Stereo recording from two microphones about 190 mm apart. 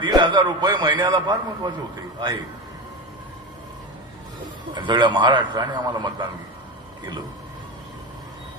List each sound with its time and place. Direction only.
0.0 s a man's voice: 25° right (ahead or behind)
4.7 s a man's voice: 25° right (ahead or behind)